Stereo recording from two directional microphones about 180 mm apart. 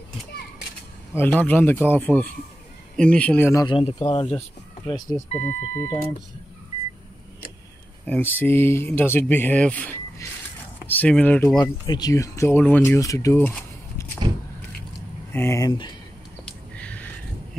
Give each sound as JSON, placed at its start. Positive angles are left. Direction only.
{"t": 1.1, "sound": "speech", "side_deg": 10}
{"t": 3.6, "sound": "speech", "side_deg": 30}
{"t": 5.3, "sound": "speech", "side_deg": 10}
{"t": 8.0, "sound": "speech", "side_deg": 10}
{"t": 11.5, "sound": "speech", "side_deg": 25}
{"t": 13.4, "sound": "a sound", "side_deg": 5}
{"t": 15.3, "sound": "speech", "side_deg": 15}
{"t": 16.4, "sound": "a sound", "side_deg": 5}